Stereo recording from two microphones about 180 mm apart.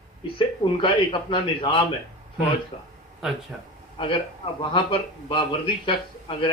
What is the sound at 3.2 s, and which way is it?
Speech, 5° right (ahead or behind).